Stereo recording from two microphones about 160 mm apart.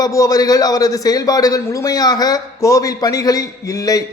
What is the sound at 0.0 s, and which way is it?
A man's voice, 20° left (ahead or behind).